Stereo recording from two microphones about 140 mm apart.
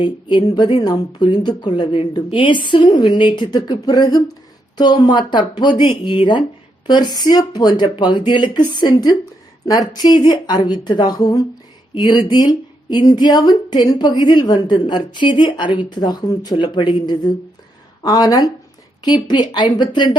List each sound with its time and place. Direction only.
0.0 s a woman's voice: 35° left (ahead or behind)